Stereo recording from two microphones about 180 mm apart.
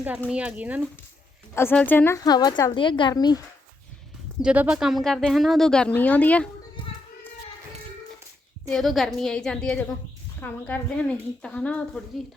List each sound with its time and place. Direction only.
0.3 s speech: 5° right (ahead or behind)
1.5 s a woman's voice: 10° left (ahead or behind)
4.4 s speech: 5° right (ahead or behind)
8.7 s speech: centre (ahead or behind)